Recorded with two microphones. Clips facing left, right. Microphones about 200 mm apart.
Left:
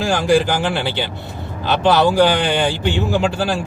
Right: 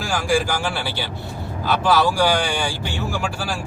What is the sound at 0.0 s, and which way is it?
A man's voice, 20° left (ahead or behind).